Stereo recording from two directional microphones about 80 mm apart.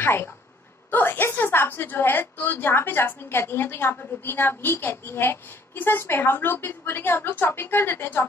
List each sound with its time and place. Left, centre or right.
0.0 s a woman's voice: left